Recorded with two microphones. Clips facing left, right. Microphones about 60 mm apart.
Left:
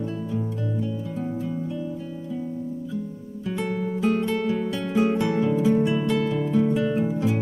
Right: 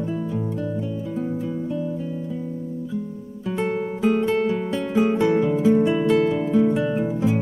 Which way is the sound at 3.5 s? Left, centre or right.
Centre.